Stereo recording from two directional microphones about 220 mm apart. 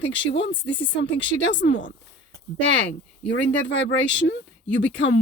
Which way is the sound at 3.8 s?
55° left (ahead or behind).